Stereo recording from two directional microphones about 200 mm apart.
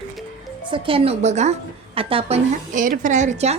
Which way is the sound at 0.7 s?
25° right (ahead or behind).